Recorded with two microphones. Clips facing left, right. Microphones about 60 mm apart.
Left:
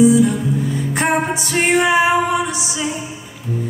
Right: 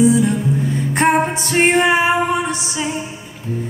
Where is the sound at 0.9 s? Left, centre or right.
Right.